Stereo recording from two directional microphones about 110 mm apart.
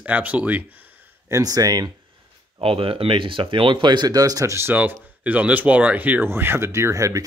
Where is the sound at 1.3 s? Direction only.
30° right (ahead or behind).